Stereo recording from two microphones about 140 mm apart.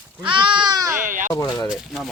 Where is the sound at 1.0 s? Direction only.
70° right (ahead or behind).